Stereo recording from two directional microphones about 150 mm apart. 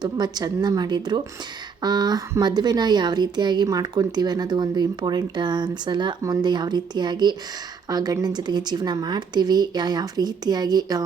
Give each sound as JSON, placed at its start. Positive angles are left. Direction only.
{"t": 0.0, "sound": "speech", "side_deg": -25}